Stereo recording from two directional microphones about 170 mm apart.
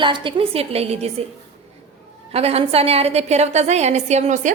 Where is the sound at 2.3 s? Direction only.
35° right (ahead or behind).